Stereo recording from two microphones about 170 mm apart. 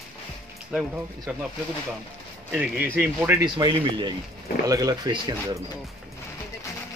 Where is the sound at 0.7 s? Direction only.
5° right (ahead or behind).